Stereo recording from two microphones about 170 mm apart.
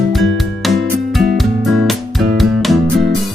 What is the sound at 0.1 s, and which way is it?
Music, centre (ahead or behind).